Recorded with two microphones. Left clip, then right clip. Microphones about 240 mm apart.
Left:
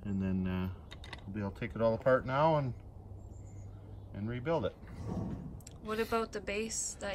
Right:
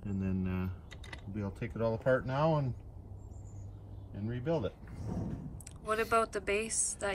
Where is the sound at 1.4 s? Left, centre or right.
Centre.